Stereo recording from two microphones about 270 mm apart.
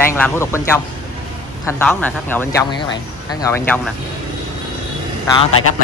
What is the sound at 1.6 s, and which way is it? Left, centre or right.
Speech, centre.